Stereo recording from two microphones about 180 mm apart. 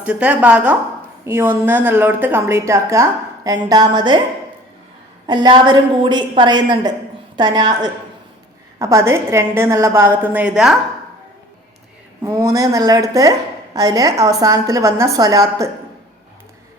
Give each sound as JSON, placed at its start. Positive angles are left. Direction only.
{"t": 0.0, "sound": "a woman's voice", "side_deg": -5}
{"t": 5.2, "sound": "a woman's voice", "side_deg": -25}
{"t": 12.2, "sound": "a woman's voice", "side_deg": -15}